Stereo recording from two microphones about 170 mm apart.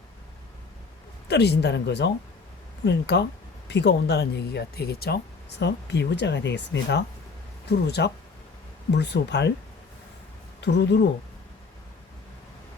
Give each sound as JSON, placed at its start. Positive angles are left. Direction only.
{"t": 1.3, "sound": "speech", "side_deg": 75}
{"t": 10.6, "sound": "speech", "side_deg": 90}